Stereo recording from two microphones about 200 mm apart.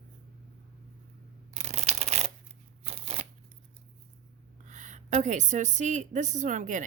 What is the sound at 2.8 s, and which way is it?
Shuffling cards, 35° right (ahead or behind).